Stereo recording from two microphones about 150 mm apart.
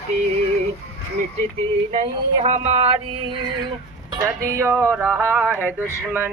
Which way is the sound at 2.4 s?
50° right (ahead or behind).